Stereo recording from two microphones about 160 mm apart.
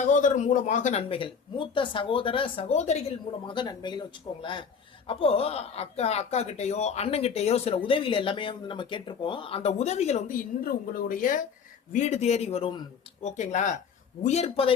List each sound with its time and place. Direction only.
0.0 s speech: 55° left (ahead or behind)
3.4 s speech: 30° left (ahead or behind)